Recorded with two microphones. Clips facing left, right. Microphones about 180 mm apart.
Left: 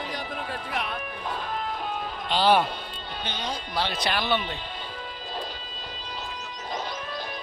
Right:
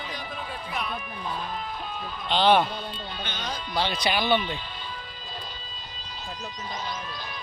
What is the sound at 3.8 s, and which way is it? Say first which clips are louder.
Speech: right 2 dB; centre (ahead or behind).